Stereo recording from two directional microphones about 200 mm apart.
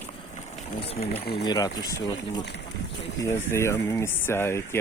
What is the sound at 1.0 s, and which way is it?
Speech, 50° left (ahead or behind).